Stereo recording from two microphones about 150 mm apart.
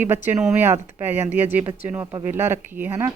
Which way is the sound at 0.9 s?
15° right (ahead or behind).